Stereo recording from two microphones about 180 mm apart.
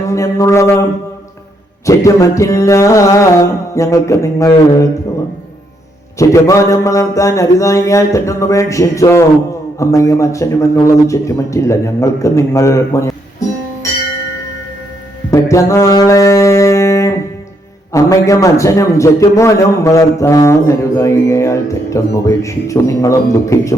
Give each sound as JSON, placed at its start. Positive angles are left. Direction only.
{"t": 0.1, "sound": "a man's voice", "side_deg": 15}
{"t": 1.9, "sound": "a man's voice", "side_deg": 15}
{"t": 6.1, "sound": "a man's voice", "side_deg": 15}
{"t": 15.3, "sound": "music", "side_deg": 15}
{"t": 17.9, "sound": "a man's voice", "side_deg": 20}